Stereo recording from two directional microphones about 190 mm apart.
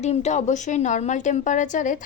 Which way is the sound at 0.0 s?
35° left (ahead or behind).